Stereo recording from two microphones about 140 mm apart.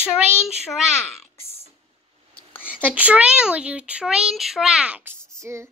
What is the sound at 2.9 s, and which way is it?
Speech, 10° right (ahead or behind).